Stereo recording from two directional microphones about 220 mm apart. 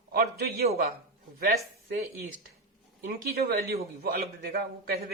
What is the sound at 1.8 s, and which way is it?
Speech, 45° right (ahead or behind).